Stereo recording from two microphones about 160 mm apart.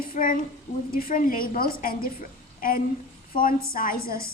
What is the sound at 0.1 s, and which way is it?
A woman's voice, 60° left (ahead or behind).